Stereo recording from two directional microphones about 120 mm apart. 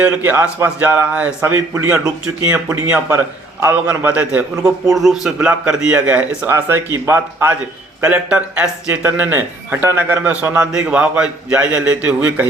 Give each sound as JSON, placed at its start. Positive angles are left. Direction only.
{"t": 0.0, "sound": "speech", "side_deg": -15}
{"t": 8.0, "sound": "speech", "side_deg": -10}